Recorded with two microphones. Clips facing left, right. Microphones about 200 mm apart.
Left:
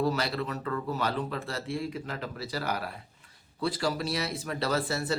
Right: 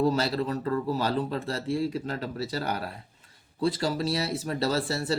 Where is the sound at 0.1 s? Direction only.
30° right (ahead or behind).